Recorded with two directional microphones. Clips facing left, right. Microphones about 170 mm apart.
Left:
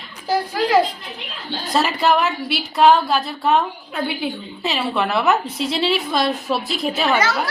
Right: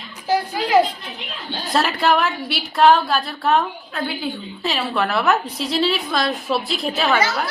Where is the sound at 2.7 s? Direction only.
15° left (ahead or behind).